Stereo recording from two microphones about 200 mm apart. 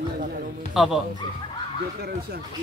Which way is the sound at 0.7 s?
Centre (ahead or behind).